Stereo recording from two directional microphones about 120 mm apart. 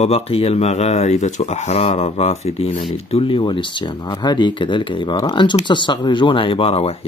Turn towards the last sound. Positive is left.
turn(degrees=55)  # may be behind; listen again after turning